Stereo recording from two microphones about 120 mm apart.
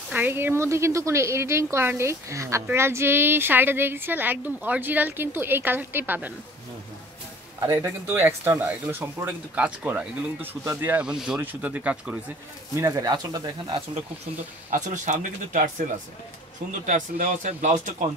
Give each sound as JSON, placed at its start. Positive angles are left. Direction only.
{"t": 0.1, "sound": "a woman's voice", "side_deg": -15}
{"t": 7.8, "sound": "speech", "side_deg": -20}
{"t": 12.7, "sound": "speech", "side_deg": -25}
{"t": 14.7, "sound": "speech", "side_deg": -90}
{"t": 16.8, "sound": "speech", "side_deg": -85}